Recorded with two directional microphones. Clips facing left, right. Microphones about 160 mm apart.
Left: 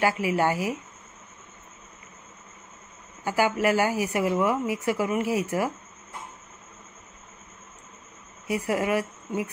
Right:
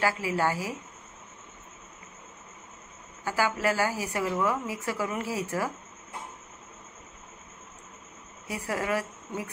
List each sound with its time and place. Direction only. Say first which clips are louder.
0.0 s a woman's voice: left 4 dB; 15° left (ahead or behind)
3.3 s a woman's voice: left 4 dB; 15° left (ahead or behind)
8.5 s a woman's voice: left 5 dB; 15° left (ahead or behind)